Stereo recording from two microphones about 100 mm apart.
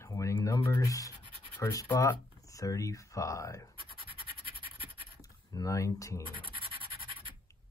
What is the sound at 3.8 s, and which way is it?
Scratch, 60° right (ahead or behind).